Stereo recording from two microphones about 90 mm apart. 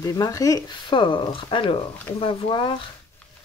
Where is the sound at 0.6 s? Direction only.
60° left (ahead or behind).